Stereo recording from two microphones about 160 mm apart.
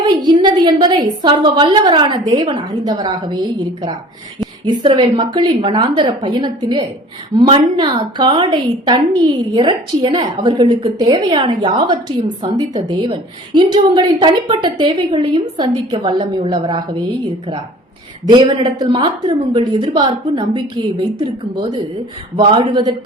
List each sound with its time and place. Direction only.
0.0 s a woman's voice: 25° right (ahead or behind)
18.3 s a woman's voice: 30° right (ahead or behind)